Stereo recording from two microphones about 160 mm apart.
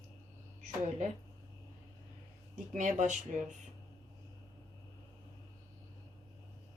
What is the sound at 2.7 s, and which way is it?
Speech, 50° right (ahead or behind).